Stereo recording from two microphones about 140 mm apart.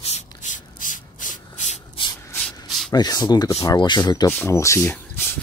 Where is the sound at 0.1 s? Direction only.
60° left (ahead or behind).